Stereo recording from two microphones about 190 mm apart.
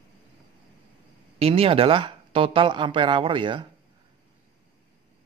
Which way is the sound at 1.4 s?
30° right (ahead or behind).